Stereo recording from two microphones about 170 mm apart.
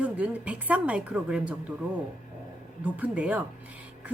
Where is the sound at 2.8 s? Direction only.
5° right (ahead or behind).